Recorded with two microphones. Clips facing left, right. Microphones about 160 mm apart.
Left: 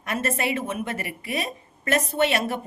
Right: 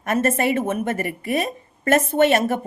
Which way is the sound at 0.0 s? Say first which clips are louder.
Right 6 dB; 45° right (ahead or behind).